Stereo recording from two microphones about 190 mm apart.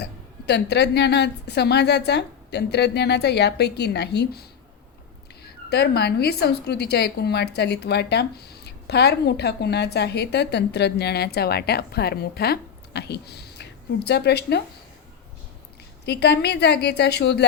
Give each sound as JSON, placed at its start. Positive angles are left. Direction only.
{"t": 0.0, "sound": "a woman's voice", "side_deg": 60}
{"t": 16.0, "sound": "a woman's voice", "side_deg": 60}